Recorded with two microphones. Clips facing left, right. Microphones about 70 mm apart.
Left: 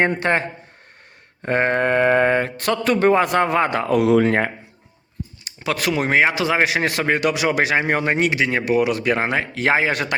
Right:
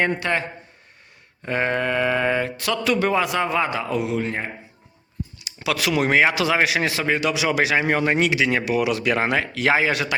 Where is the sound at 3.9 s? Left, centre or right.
Left.